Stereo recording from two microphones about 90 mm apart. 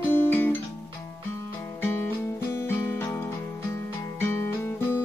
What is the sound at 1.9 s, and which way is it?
Music, 25° left (ahead or behind).